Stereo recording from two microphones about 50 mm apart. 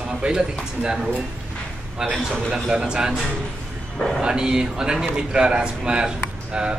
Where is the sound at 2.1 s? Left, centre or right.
Centre.